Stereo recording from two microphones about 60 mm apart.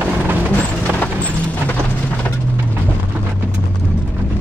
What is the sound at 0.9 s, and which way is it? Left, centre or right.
Clip-clop, left.